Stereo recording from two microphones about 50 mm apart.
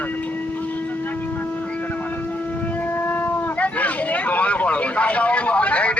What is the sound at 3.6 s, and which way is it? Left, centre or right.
Vehicle, left.